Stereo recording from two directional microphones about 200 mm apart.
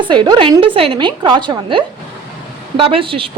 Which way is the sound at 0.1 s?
25° right (ahead or behind).